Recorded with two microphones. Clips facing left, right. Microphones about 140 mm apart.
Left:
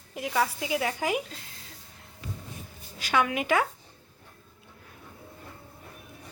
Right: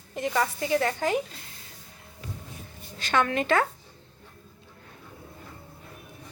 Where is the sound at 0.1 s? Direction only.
5° left (ahead or behind).